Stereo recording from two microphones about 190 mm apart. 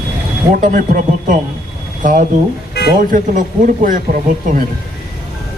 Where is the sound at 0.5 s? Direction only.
45° right (ahead or behind).